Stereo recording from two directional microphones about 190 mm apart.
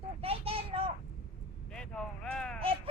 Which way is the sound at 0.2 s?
30° right (ahead or behind).